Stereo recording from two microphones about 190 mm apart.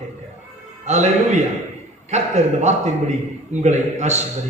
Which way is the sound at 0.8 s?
35° right (ahead or behind).